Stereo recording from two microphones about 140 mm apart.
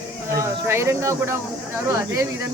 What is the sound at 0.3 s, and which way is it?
Speech, 20° right (ahead or behind).